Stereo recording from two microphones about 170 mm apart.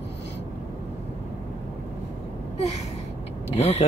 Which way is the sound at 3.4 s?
40° left (ahead or behind).